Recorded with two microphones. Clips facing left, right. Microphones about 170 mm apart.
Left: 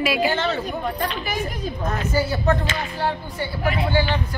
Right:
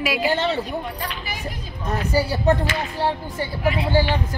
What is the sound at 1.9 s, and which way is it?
Speech, 35° right (ahead or behind).